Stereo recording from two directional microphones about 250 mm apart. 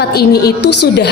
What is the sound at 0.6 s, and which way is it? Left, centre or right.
Speech, left.